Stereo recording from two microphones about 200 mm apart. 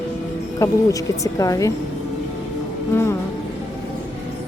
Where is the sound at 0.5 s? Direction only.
15° left (ahead or behind).